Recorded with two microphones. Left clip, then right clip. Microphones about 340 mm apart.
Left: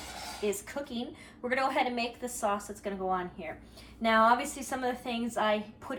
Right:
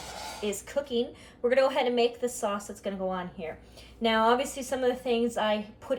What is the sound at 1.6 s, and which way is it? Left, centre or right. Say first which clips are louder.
Speech: right 5 dB; left.